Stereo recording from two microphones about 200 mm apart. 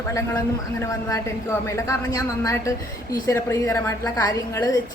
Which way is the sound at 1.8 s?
15° left (ahead or behind).